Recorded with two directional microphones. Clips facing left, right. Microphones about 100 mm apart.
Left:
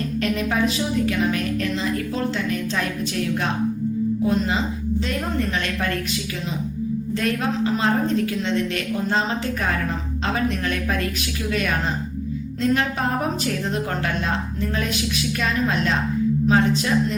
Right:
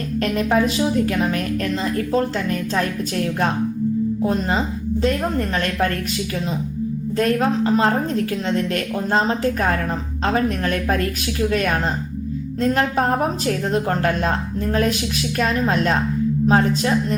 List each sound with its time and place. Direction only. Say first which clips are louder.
0.2 s a woman's voice: right 4 dB; 40° right (ahead or behind)